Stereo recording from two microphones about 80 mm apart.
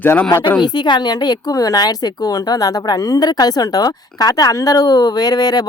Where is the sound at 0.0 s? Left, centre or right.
Left.